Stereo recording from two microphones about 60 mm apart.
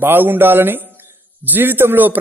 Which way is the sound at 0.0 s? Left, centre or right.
Right.